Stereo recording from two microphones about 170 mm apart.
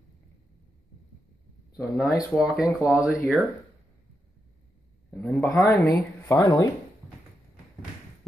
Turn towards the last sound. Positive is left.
turn(degrees=20)  # may be behind; listen again after turning